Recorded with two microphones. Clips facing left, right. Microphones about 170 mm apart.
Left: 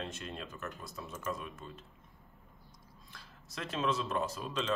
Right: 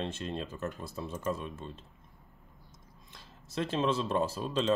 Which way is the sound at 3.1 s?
25° right (ahead or behind).